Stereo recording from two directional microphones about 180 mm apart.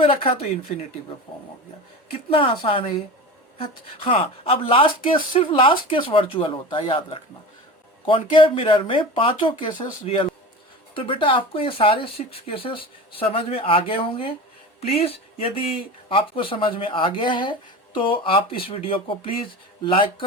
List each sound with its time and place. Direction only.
0.0 s speech: 30° left (ahead or behind)